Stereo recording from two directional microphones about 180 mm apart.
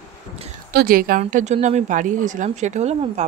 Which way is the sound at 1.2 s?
40° right (ahead or behind).